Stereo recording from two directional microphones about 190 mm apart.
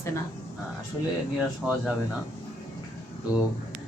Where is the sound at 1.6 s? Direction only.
Centre (ahead or behind).